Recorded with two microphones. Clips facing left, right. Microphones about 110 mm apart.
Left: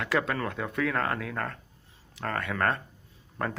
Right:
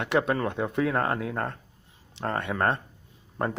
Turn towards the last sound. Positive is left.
turn(degrees=-20)  # may be behind; listen again after turning